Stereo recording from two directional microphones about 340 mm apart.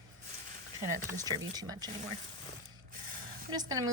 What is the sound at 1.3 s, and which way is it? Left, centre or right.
Speech, centre.